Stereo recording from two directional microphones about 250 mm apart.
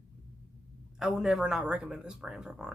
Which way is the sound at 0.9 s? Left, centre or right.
Centre.